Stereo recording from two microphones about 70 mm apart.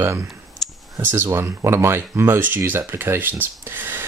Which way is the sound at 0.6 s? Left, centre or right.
Centre.